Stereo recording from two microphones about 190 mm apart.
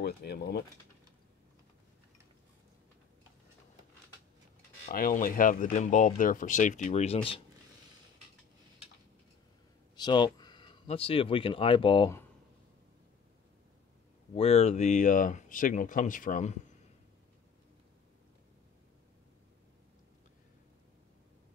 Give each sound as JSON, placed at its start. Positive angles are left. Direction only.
{"t": 0.0, "sound": "speech", "side_deg": 60}
{"t": 4.9, "sound": "speech", "side_deg": 45}
{"t": 9.9, "sound": "speech", "side_deg": 20}
{"t": 14.3, "sound": "speech", "side_deg": 30}